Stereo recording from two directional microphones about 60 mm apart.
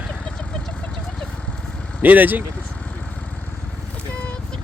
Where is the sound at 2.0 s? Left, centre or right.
Right.